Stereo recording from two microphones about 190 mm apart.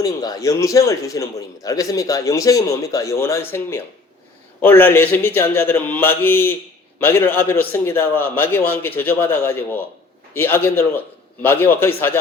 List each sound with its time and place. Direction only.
0.0 s a man's voice: 20° left (ahead or behind)